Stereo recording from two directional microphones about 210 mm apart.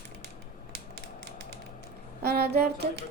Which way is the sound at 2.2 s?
50° right (ahead or behind).